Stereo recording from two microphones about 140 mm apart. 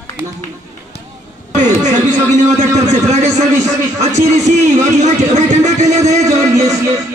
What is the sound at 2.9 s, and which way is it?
A man's voice, 55° right (ahead or behind).